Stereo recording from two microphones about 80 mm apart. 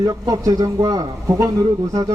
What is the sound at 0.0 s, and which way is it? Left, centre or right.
Speech, right.